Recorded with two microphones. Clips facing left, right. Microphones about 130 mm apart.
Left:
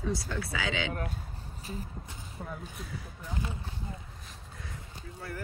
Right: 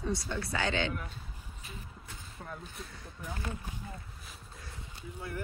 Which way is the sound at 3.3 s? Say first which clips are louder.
Left 2 dB; 15° left (ahead or behind).